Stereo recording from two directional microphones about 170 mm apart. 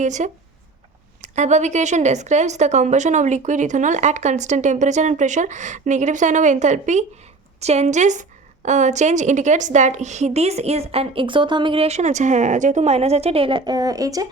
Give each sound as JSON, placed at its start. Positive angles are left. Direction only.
{"t": 0.0, "sound": "a woman's voice", "side_deg": -45}
{"t": 1.4, "sound": "a woman's voice", "side_deg": -45}